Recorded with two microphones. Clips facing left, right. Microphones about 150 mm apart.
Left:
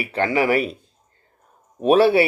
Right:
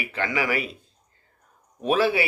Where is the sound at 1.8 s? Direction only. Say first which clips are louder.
Left 7 dB; 30° left (ahead or behind).